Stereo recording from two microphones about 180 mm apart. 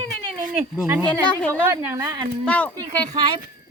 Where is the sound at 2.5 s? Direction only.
5° left (ahead or behind).